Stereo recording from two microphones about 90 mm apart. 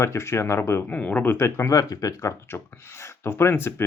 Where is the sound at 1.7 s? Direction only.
45° left (ahead or behind); by 3.8 s 25° left (ahead or behind).